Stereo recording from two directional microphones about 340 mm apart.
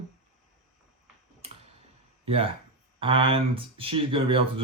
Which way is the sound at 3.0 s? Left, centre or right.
Centre.